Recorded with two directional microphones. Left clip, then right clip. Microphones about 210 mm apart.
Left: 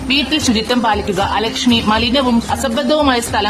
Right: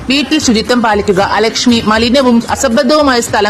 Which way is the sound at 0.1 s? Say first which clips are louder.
Right 4 dB; 40° right (ahead or behind).